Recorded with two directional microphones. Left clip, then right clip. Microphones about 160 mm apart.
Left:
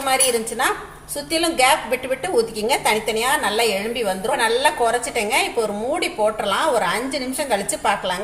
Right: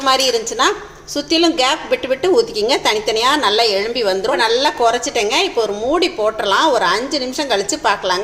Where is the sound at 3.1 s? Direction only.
50° right (ahead or behind).